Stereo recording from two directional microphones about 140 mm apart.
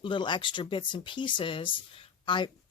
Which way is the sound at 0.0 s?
35° left (ahead or behind).